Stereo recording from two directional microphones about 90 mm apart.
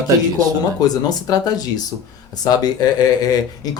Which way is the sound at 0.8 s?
45° left (ahead or behind).